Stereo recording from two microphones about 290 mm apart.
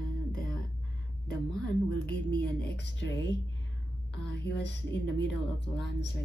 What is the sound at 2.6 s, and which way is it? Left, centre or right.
A woman's voice, left.